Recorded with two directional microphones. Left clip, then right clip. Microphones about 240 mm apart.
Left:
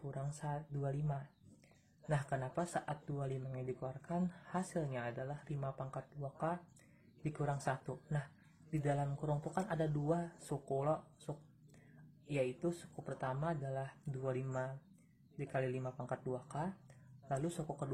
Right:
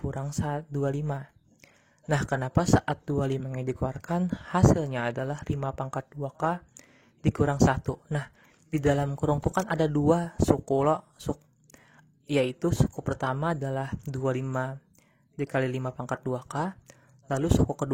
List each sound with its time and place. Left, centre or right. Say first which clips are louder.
0.1 s speech: right 9 dB; right